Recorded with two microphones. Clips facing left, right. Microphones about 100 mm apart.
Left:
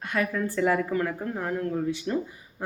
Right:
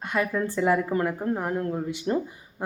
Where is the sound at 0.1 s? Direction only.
20° right (ahead or behind).